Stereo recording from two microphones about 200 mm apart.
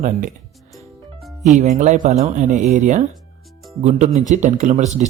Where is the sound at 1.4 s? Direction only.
35° right (ahead or behind).